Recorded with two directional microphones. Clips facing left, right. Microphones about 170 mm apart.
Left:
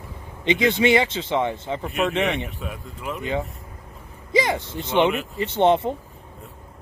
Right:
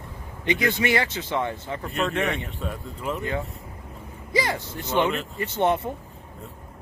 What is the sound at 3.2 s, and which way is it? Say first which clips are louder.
Speech: left 2 dB; 20° left (ahead or behind).